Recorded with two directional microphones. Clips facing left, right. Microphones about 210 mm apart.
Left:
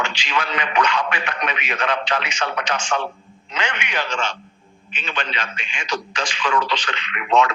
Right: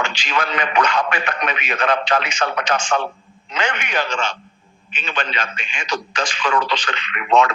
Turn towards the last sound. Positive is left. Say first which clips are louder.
# right 2 dB
turn(degrees=-45)  # may be behind; listen again after turning